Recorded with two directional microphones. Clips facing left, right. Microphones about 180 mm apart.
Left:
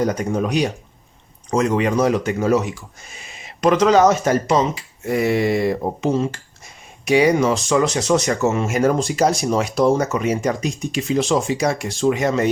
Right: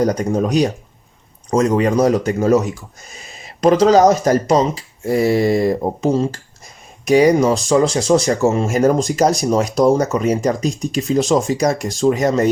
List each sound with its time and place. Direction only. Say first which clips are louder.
0.0 s speech: right 3 dB; 40° right (ahead or behind)